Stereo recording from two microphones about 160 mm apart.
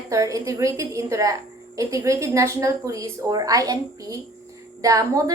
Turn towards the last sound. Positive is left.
turn(degrees=-20)  # may be behind; listen again after turning